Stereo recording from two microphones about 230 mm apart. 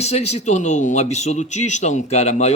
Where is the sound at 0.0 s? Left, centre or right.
Left.